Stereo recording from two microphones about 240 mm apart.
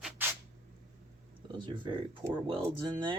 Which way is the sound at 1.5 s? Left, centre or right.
Centre.